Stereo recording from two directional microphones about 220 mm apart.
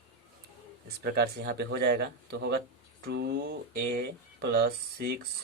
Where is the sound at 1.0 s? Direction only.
45° right (ahead or behind).